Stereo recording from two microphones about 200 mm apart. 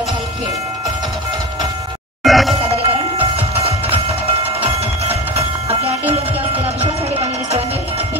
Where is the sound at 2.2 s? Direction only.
Centre (ahead or behind).